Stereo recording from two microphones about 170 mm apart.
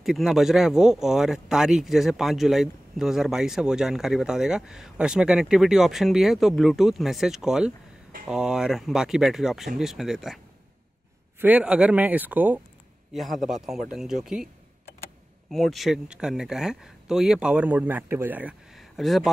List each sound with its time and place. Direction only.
0.0 s speech: centre (ahead or behind)
11.4 s speech: 10° right (ahead or behind)
15.5 s speech: centre (ahead or behind)